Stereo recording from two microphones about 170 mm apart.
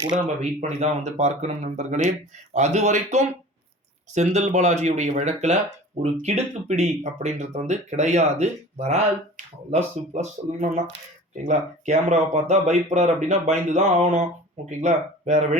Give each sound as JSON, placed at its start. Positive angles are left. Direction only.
{"t": 0.6, "sound": "speech", "side_deg": -40}